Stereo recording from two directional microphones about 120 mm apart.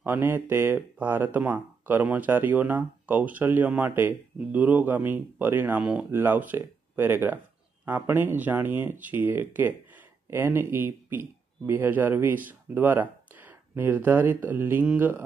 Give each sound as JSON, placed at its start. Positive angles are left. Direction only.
{"t": 0.0, "sound": "speech", "side_deg": -15}